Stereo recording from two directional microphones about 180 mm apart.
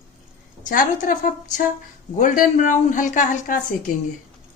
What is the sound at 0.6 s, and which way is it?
Speech, 50° left (ahead or behind).